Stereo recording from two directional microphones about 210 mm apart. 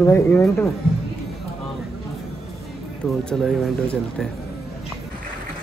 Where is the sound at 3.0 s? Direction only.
Centre (ahead or behind).